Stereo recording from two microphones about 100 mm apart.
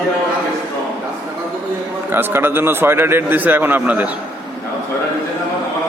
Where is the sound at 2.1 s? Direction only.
20° right (ahead or behind).